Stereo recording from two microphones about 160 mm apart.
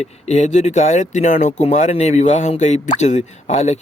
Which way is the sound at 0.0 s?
45° left (ahead or behind).